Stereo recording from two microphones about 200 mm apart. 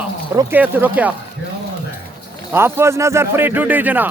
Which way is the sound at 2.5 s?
10° right (ahead or behind).